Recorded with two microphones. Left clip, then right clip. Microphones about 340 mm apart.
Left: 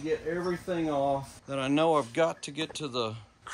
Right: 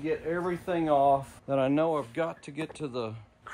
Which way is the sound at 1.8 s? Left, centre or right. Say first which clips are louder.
Left 4 dB; centre.